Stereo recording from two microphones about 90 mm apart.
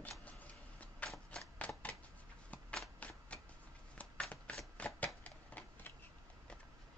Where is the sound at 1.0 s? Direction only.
5° left (ahead or behind).